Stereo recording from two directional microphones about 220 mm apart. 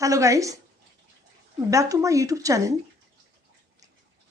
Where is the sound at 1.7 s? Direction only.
15° right (ahead or behind).